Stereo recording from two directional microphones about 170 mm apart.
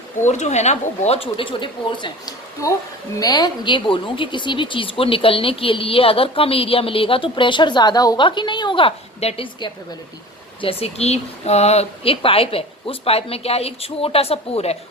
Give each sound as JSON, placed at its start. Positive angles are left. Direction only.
{"t": 0.3, "sound": "a woman's voice", "side_deg": 45}